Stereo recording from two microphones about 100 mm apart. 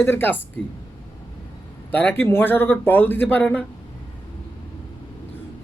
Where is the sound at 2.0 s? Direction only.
20° left (ahead or behind).